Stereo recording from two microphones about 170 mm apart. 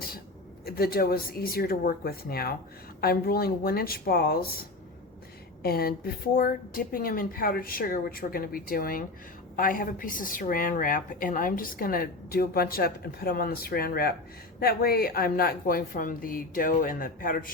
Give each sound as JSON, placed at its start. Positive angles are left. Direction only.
{"t": 0.6, "sound": "a woman's voice", "side_deg": 60}
{"t": 5.6, "sound": "a woman's voice", "side_deg": 65}